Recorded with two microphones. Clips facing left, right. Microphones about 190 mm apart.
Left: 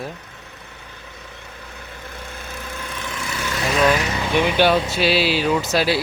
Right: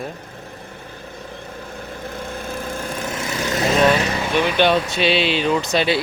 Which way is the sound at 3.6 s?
25° right (ahead or behind).